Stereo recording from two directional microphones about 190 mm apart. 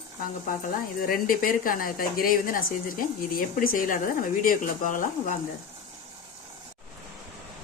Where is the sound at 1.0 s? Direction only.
50° left (ahead or behind).